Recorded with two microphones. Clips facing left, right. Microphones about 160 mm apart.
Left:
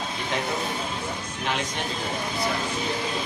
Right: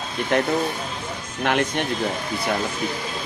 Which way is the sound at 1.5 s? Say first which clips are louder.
Right 8 dB; 60° right (ahead or behind).